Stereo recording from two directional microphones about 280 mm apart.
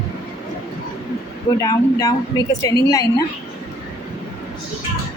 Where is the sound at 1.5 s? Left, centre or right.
Centre.